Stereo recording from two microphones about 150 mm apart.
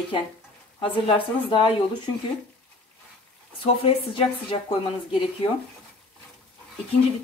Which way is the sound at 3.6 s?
35° left (ahead or behind).